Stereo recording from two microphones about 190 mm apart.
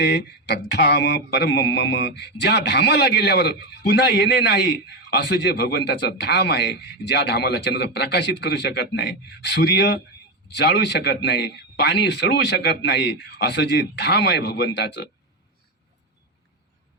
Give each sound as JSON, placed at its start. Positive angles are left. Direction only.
{"t": 0.0, "sound": "speech", "side_deg": 65}